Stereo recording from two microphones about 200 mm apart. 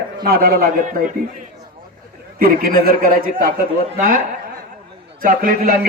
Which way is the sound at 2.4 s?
45° right (ahead or behind).